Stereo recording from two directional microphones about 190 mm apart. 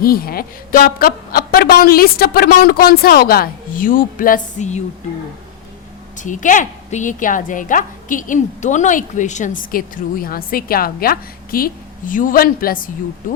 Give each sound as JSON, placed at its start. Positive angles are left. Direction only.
{"t": 0.0, "sound": "a woman's voice", "side_deg": 50}
{"t": 6.1, "sound": "a woman's voice", "side_deg": 40}